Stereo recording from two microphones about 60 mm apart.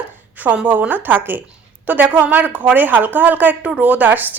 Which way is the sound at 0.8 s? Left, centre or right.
Right.